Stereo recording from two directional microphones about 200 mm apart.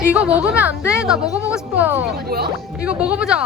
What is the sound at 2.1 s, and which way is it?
Speech, 50° right (ahead or behind).